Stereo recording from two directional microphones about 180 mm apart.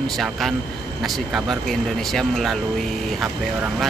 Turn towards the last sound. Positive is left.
turn(degrees=0)  # may be behind; listen again after turning